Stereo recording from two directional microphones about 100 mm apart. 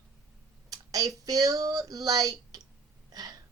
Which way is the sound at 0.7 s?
35° right (ahead or behind).